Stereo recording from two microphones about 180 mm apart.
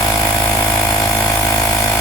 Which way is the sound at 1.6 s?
15° left (ahead or behind).